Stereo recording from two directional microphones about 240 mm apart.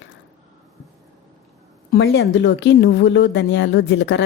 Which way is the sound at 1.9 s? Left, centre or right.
Left.